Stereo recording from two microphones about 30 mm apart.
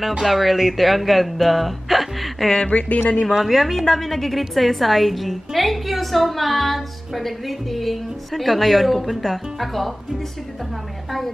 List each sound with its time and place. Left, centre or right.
0.2 s speech: centre
2.7 s speech: left
3.3 s a woman's voice: centre
11.1 s a woman's voice: centre